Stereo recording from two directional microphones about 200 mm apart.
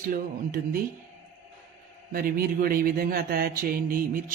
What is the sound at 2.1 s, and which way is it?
Speech, 50° right (ahead or behind).